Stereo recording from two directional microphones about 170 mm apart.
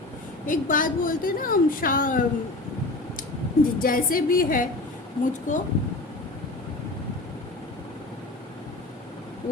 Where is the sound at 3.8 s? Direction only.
55° left (ahead or behind).